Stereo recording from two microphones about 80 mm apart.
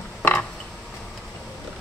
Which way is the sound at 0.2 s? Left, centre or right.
Left.